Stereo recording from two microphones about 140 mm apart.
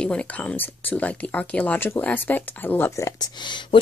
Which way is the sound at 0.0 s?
5° left (ahead or behind).